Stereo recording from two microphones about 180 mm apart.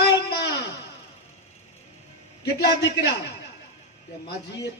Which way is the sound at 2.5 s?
70° left (ahead or behind).